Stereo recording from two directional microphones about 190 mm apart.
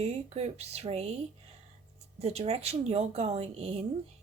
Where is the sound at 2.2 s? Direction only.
35° right (ahead or behind).